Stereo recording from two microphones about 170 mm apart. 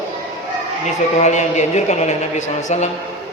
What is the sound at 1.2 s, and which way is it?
A man's voice, 45° left (ahead or behind).